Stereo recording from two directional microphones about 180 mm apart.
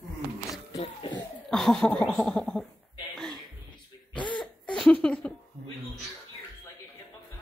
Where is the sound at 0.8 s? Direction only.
30° left (ahead or behind).